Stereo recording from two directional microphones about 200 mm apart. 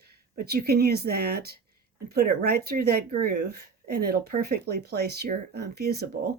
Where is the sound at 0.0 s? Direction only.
50° right (ahead or behind).